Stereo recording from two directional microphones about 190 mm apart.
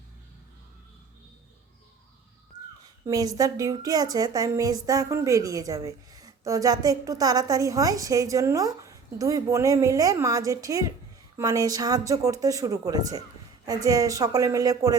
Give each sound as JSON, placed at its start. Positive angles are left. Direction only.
{"t": 3.1, "sound": "a woman's voice", "side_deg": -20}